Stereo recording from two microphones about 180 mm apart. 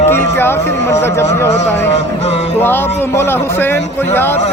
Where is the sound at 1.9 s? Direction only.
40° left (ahead or behind).